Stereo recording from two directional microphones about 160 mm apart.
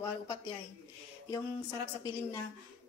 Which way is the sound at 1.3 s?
25° left (ahead or behind).